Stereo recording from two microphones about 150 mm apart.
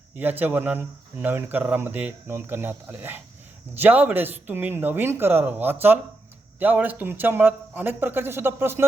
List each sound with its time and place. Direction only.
0.2 s speech: 10° right (ahead or behind)